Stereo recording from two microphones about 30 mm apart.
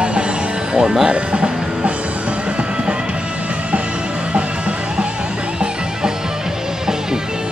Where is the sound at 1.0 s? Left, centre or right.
Right.